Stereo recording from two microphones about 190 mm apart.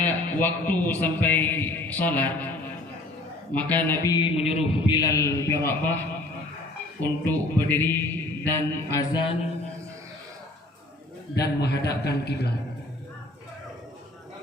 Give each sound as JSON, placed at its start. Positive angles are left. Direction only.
{"t": 0.0, "sound": "a man's voice", "side_deg": 10}
{"t": 7.0, "sound": "a man's voice", "side_deg": 10}
{"t": 11.3, "sound": "a man's voice", "side_deg": 60}